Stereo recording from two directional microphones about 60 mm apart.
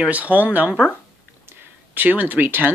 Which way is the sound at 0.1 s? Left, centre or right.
Right.